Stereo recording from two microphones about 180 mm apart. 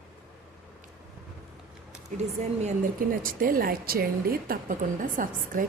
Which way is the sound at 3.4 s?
55° right (ahead or behind).